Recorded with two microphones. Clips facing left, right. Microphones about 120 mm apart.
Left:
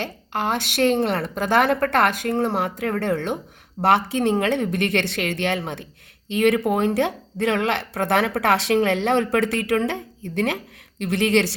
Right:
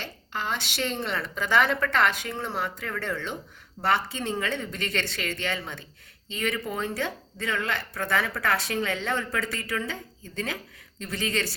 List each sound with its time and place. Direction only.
0.0 s a woman's voice: 55° left (ahead or behind); by 11.5 s 75° left (ahead or behind)